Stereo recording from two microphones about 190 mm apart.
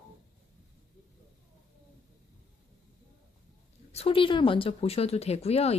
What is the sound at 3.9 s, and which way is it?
Speech, 30° left (ahead or behind).